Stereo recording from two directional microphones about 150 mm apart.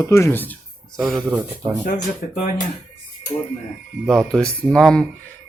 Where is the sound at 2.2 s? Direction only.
65° left (ahead or behind).